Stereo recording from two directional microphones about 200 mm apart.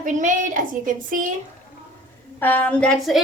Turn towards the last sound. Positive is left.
turn(degrees=0)  # may be behind; listen again after turning